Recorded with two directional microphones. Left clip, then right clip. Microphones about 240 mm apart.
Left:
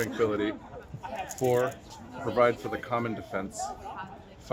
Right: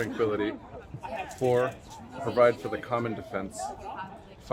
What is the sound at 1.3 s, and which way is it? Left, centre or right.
Speech, centre.